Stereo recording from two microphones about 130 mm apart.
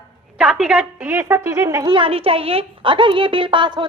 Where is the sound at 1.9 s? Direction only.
45° right (ahead or behind).